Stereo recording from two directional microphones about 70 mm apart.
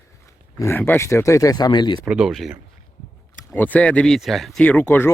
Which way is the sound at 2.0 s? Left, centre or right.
Centre.